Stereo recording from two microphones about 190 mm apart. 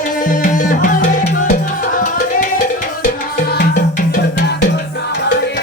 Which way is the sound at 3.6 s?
45° left (ahead or behind).